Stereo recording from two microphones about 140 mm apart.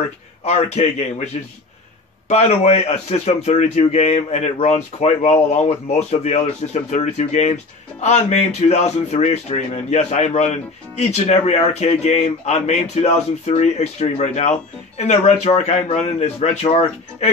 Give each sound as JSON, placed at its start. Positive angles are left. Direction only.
{"t": 0.4, "sound": "a man's voice", "side_deg": 50}